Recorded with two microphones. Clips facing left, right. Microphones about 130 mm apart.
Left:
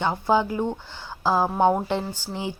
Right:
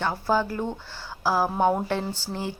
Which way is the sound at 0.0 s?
20° left (ahead or behind).